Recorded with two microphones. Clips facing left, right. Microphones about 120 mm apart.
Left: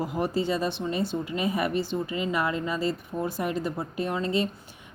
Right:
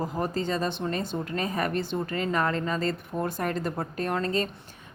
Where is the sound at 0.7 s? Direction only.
50° right (ahead or behind).